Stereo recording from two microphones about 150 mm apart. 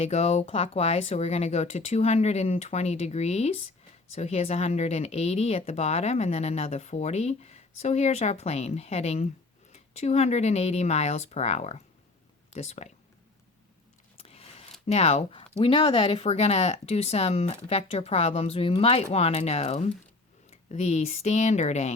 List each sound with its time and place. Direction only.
0.0 s speech: 45° left (ahead or behind)
14.2 s a sound: 40° left (ahead or behind)
15.6 s speech: 35° left (ahead or behind)